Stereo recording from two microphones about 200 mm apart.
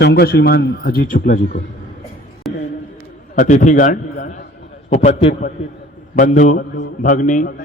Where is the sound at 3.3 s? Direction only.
40° left (ahead or behind).